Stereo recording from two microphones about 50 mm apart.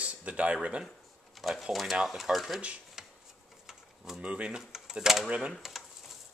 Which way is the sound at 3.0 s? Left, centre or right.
Centre.